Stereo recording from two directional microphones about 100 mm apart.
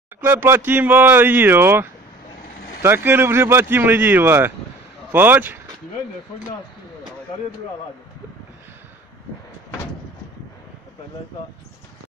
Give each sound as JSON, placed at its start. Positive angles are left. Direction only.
{"t": 0.2, "sound": "speech", "side_deg": -20}